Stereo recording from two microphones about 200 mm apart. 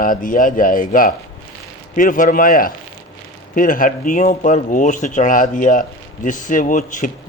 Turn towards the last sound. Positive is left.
turn(degrees=40)  # may be behind; listen again after turning